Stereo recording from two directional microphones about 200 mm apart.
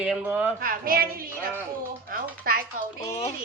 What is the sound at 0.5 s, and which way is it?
A woman's voice, 45° right (ahead or behind).